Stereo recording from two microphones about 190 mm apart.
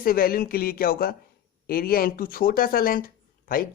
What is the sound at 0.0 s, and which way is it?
Speech, 50° left (ahead or behind).